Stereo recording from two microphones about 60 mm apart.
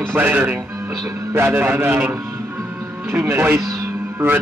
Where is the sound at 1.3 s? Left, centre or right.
Right.